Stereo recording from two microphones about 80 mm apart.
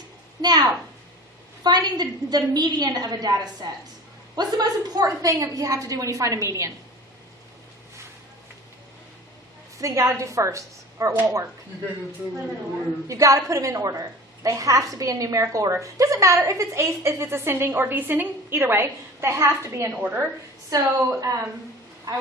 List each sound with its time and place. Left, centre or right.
0.4 s a woman's voice: right
9.7 s a woman's voice: right
13.1 s a woman's voice: right
20.0 s a woman's voice: right
20.7 s a woman's voice: right